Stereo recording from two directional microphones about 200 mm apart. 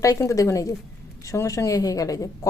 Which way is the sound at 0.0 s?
15° left (ahead or behind).